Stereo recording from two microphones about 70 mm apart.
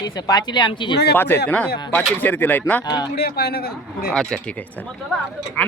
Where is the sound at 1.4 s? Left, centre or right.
Centre.